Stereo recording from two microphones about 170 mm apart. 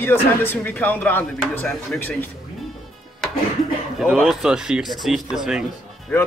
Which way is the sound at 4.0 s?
5° right (ahead or behind).